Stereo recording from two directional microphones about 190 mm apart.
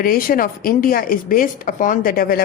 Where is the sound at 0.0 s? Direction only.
50° left (ahead or behind).